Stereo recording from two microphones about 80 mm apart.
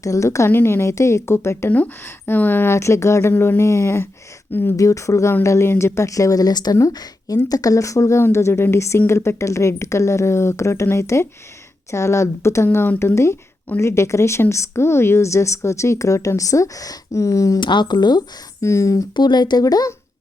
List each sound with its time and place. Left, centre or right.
0.0 s a woman's voice: left
1.7 s speech: left
2.7 s a woman's voice: left
4.8 s a woman's voice: left
17.6 s speech: left
18.6 s a woman's voice: left
19.1 s speech: left